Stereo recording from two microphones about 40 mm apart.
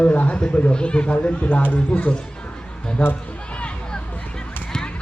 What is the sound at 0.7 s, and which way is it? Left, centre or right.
Speech, left.